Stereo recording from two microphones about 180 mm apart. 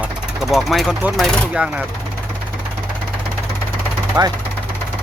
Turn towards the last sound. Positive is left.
turn(degrees=-15)  # may be behind; listen again after turning